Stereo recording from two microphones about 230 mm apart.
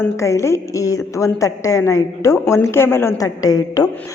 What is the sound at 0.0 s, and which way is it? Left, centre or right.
A man's voice, centre.